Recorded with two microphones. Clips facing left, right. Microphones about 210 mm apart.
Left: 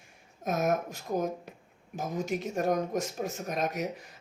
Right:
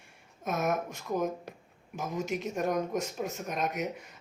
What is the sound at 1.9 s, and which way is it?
Speech, 35° left (ahead or behind).